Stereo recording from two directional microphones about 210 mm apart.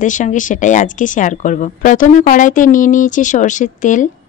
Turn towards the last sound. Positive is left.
turn(degrees=35)  # may be behind; listen again after turning